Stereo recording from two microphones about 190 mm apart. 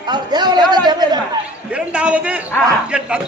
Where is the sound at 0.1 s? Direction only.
20° right (ahead or behind).